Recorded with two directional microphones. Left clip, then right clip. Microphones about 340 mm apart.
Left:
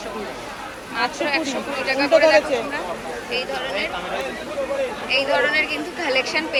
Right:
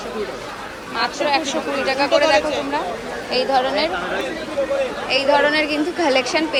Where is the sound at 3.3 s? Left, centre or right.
Centre.